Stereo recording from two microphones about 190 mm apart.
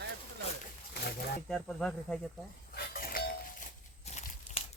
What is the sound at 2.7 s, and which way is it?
Doorbell, 50° left (ahead or behind).